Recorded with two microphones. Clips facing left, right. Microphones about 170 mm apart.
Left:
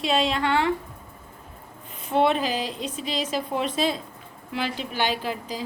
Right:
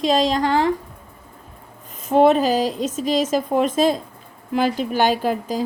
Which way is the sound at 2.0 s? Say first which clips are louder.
Right 7 dB; 40° right (ahead or behind).